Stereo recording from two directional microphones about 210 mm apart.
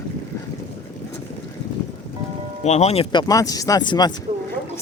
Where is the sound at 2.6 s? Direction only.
30° left (ahead or behind).